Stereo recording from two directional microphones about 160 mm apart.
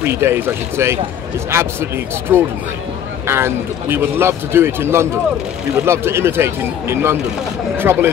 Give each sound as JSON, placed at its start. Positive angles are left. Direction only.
{"t": 0.0, "sound": "speech", "side_deg": -15}
{"t": 2.3, "sound": "speech", "side_deg": -10}